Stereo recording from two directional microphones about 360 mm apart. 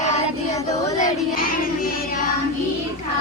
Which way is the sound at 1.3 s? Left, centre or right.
Left.